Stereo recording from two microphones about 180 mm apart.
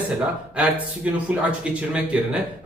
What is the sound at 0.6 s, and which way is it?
A man's voice, 5° right (ahead or behind).